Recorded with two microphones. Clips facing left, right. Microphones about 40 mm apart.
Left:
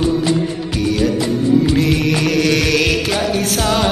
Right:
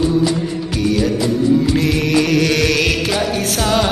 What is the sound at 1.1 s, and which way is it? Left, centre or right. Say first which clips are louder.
Music: even; left.